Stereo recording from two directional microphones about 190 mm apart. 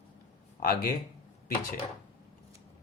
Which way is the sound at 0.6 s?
50° left (ahead or behind).